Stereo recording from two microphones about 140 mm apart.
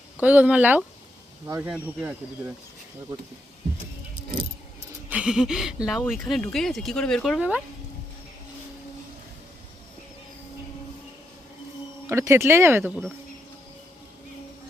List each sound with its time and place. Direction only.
0.2 s speech: 10° right (ahead or behind)
1.7 s speech: 10° right (ahead or behind)
5.0 s speech: 10° right (ahead or behind)
12.0 s speech: 20° right (ahead or behind)